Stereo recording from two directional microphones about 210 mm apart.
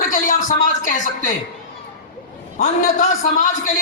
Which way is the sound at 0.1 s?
40° left (ahead or behind).